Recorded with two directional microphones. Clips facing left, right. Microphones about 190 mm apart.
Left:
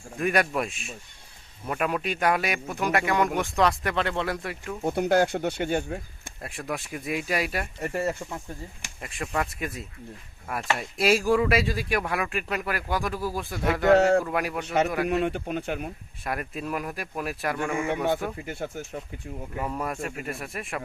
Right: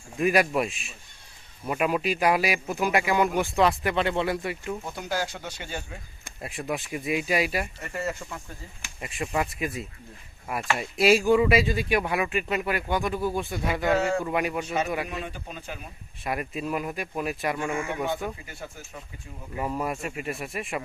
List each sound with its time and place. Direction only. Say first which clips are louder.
0.2 s speech: right 2 dB; 5° right (ahead or behind)
4.8 s speech: left 9 dB; 60° left (ahead or behind)
6.4 s speech: right 2 dB; centre (ahead or behind)
7.8 s speech: left 4 dB; 35° left (ahead or behind)
9.0 s speech: right 1 dB; 5° right (ahead or behind)
13.9 s speech: left 7 dB; 65° left (ahead or behind)
14.3 s speech: right 1 dB; centre (ahead or behind)
15.0 s speech: left 10 dB; 65° left (ahead or behind)
16.2 s speech: right 1 dB; centre (ahead or behind)
19.5 s speech: right 2 dB; 5° right (ahead or behind)